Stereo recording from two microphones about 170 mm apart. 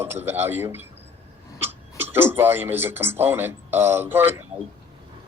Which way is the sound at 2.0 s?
15° right (ahead or behind).